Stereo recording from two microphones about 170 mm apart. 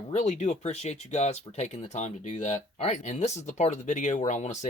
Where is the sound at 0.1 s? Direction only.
45° left (ahead or behind).